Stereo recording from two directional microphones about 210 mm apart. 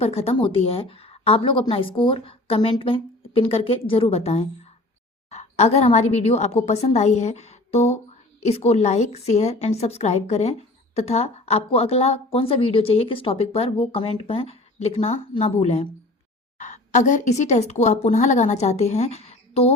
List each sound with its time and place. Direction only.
0.0 s a woman's voice: 30° left (ahead or behind)